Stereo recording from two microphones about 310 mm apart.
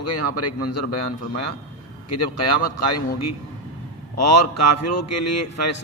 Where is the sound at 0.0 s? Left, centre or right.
Left.